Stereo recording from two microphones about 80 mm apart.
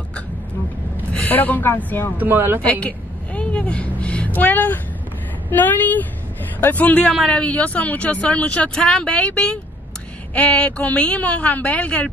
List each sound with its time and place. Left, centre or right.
1.1 s a woman's voice: left
2.1 s speech: right
2.6 s speech: centre
3.3 s vehicle: centre
5.5 s speech: left